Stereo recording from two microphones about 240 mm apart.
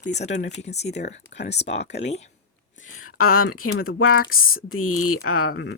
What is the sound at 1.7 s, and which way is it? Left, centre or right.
Speech, left.